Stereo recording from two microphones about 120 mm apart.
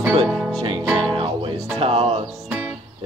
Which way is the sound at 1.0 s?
45° right (ahead or behind).